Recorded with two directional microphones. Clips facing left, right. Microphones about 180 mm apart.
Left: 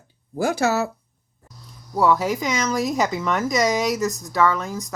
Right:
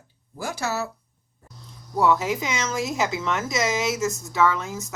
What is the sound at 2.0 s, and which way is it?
Speech, 40° left (ahead or behind).